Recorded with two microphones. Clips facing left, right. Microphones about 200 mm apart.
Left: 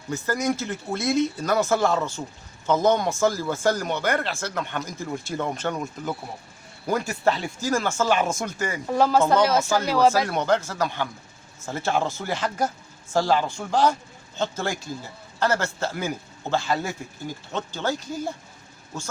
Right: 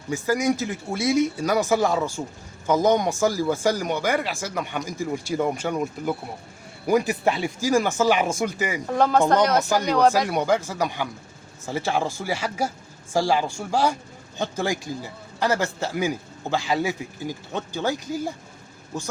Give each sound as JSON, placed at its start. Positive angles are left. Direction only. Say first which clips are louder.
{"t": 0.1, "sound": "a man's voice", "louder": "right 3 dB", "side_deg": -15}
{"t": 6.8, "sound": "a man's voice", "louder": "right 3 dB", "side_deg": -15}
{"t": 8.9, "sound": "speech", "louder": "even", "side_deg": 5}
{"t": 10.2, "sound": "a man's voice", "louder": "right 1 dB", "side_deg": -10}